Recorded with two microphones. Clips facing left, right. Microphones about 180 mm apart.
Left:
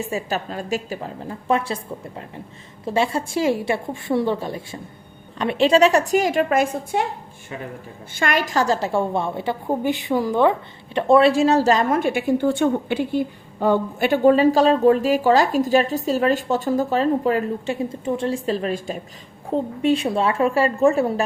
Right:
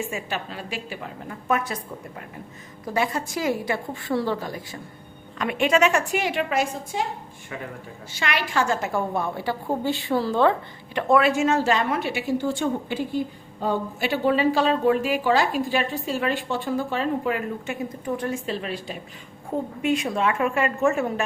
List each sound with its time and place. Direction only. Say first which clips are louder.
0.0 s a woman's voice: left 4 dB; 40° left (ahead or behind)
8.1 s a woman's voice: left 4 dB; 45° left (ahead or behind); by 10.5 s 15° left (ahead or behind)
10.9 s a woman's voice: left 5 dB; 30° left (ahead or behind); by 14.1 s 70° left (ahead or behind)
14.1 s a woman's voice: left 6 dB; 45° left (ahead or behind); by 18.3 s 25° left (ahead or behind)
18.4 s a woman's voice: left 6 dB; 40° left (ahead or behind)
19.8 s a woman's voice: left 3 dB; 30° left (ahead or behind)